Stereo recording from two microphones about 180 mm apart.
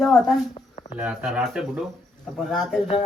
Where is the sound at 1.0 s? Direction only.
5° right (ahead or behind).